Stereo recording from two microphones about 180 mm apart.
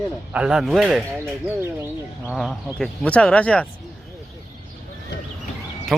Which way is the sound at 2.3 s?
Centre (ahead or behind).